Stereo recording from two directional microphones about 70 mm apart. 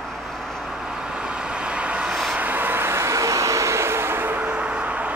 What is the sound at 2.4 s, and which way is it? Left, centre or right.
Vehicle, right.